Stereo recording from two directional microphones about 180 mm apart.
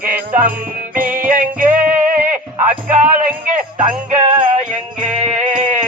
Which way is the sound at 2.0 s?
45° right (ahead or behind).